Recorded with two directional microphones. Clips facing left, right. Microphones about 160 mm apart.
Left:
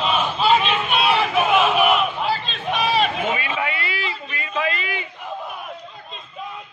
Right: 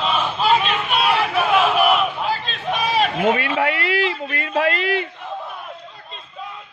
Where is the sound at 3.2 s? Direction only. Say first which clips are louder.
Right 5 dB; 70° right (ahead or behind).